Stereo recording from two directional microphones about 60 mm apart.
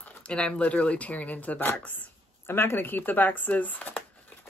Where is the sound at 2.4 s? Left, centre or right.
Left.